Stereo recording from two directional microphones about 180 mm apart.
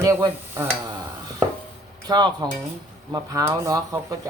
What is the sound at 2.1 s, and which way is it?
Speech, 20° right (ahead or behind).